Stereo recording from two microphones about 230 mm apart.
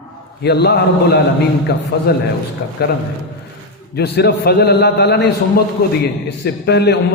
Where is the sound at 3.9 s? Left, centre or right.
Left.